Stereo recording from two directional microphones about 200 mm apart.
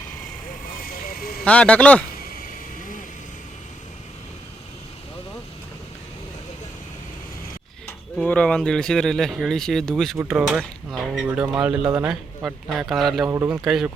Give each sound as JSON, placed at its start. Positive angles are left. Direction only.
{"t": 0.8, "sound": "vehicle", "side_deg": 50}
{"t": 1.5, "sound": "speech", "side_deg": 5}
{"t": 2.3, "sound": "vehicle", "side_deg": 40}
{"t": 8.1, "sound": "speech", "side_deg": 5}
{"t": 13.2, "sound": "speech", "side_deg": -15}
{"t": 13.7, "sound": "speech", "side_deg": 0}